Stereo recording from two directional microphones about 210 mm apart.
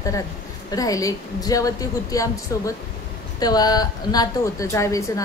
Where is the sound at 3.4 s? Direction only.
20° left (ahead or behind).